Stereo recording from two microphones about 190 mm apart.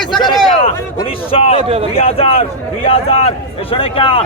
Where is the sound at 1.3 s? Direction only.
30° left (ahead or behind).